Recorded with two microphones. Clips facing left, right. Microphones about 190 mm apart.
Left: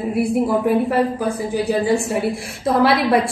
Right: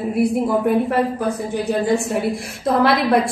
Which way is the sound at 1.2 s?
Centre (ahead or behind).